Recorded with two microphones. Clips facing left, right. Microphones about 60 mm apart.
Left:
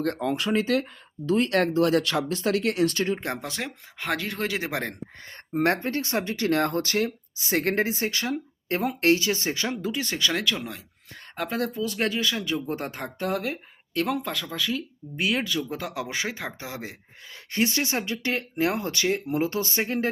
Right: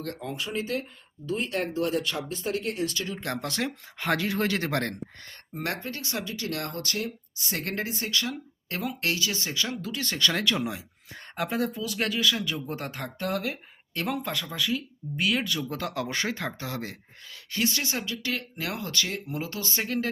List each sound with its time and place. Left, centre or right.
0.2 s speech: left
1.3 s speech: left
2.8 s speech: left
3.4 s speech: centre
5.5 s speech: left
9.8 s speech: centre
10.4 s speech: centre
11.9 s speech: centre
15.1 s speech: centre
17.5 s speech: left